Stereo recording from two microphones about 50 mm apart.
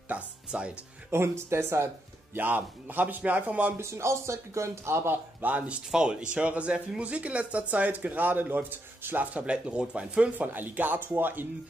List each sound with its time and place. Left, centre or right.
0.1 s speech: right
1.1 s speech: right
2.3 s speech: right
3.7 s speech: right
5.4 s speech: right
5.9 s speech: centre
10.4 s speech: right